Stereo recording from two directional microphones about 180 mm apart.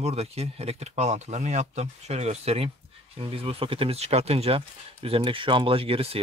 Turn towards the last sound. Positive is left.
turn(degrees=-30)  # may be behind; listen again after turning